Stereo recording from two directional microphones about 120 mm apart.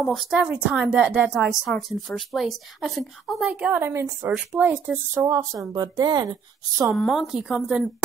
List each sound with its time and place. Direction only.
0.0 s a woman's voice: centre (ahead or behind)
3.5 s speech: 15° right (ahead or behind)
5.2 s speech: 30° right (ahead or behind)
6.9 s a woman's voice: centre (ahead or behind)